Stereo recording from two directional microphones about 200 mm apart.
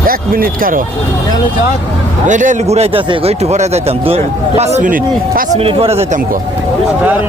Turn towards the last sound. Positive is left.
turn(degrees=-35)  # may be behind; listen again after turning